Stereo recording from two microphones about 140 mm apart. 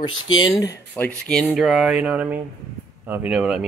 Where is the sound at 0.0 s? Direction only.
30° left (ahead or behind).